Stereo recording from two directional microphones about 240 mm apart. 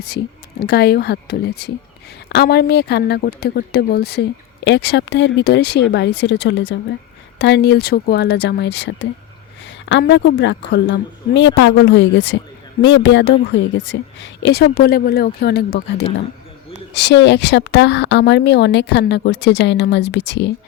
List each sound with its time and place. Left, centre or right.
0.6 s speech: left